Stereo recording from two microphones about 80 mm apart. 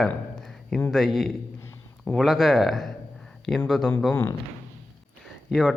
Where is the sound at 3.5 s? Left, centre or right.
Left.